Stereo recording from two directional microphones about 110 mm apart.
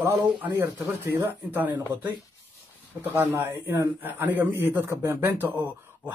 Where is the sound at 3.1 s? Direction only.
20° right (ahead or behind).